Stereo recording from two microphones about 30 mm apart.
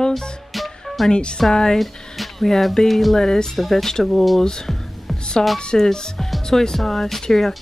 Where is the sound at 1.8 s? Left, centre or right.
Centre.